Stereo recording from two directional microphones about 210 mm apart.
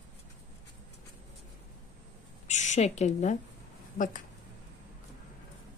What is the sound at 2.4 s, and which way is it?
Speech, 35° left (ahead or behind).